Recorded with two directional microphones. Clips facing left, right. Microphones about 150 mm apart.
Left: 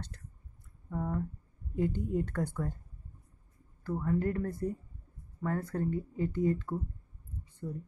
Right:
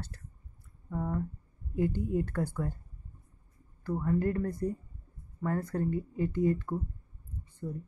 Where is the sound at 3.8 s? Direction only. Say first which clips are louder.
Right 2 dB; 10° right (ahead or behind).